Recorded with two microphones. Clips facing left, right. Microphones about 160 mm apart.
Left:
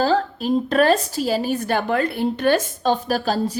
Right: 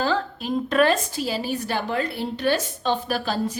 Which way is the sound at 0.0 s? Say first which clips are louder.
Left 5 dB; 40° left (ahead or behind).